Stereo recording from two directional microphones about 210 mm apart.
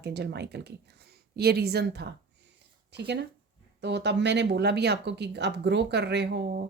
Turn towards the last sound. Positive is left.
turn(degrees=-55)  # may be behind; listen again after turning